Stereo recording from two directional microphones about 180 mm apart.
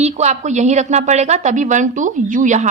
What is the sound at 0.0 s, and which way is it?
A woman's voice, 40° right (ahead or behind).